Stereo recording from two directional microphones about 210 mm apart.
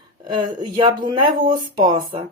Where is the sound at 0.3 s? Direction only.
25° right (ahead or behind).